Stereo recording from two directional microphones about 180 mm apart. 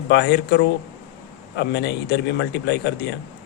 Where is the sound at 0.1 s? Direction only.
65° left (ahead or behind).